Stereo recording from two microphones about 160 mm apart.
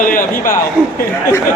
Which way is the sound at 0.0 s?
60° left (ahead or behind).